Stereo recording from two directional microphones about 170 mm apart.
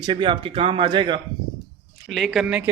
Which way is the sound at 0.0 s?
25° right (ahead or behind).